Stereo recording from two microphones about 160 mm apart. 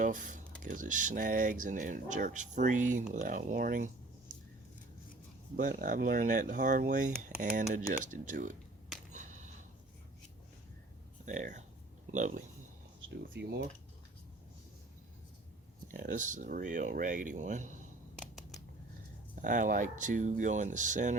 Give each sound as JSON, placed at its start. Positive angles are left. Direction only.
{"t": 0.0, "sound": "speech", "side_deg": -55}
{"t": 5.5, "sound": "speech", "side_deg": -60}
{"t": 9.1, "sound": "a sound", "side_deg": -50}
{"t": 11.3, "sound": "speech", "side_deg": -50}
{"t": 13.4, "sound": "speech", "side_deg": -90}
{"t": 15.9, "sound": "speech", "side_deg": -60}
{"t": 18.2, "sound": "scissors", "side_deg": 0}
{"t": 19.4, "sound": "speech", "side_deg": -55}